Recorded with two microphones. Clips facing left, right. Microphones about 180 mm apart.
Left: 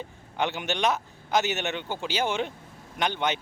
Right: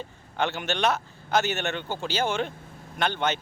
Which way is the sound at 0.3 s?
15° left (ahead or behind).